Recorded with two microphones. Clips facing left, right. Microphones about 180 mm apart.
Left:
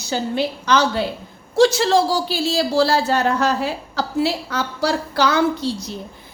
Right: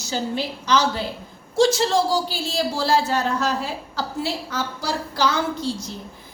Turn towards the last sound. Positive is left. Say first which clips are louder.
# left 4 dB
turn(degrees=65)  # may be behind; listen again after turning